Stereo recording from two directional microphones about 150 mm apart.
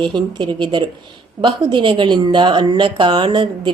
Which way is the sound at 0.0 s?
30° right (ahead or behind).